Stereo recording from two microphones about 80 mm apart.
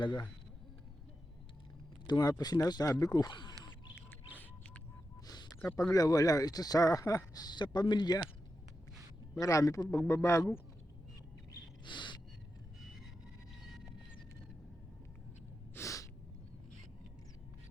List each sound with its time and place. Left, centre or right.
0.0 s speech: left
2.0 s speech: left
5.9 s speech: left
9.3 s speech: left
11.9 s gasp: left
15.7 s gasp: left